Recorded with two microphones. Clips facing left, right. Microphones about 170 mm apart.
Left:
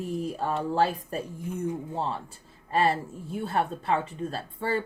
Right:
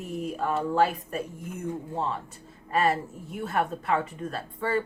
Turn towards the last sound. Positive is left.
turn(degrees=30)  # may be behind; listen again after turning